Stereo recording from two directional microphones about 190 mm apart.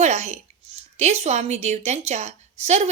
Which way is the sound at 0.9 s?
35° right (ahead or behind).